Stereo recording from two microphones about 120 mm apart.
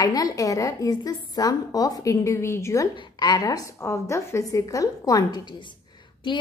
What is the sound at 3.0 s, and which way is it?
A woman's voice, 35° left (ahead or behind).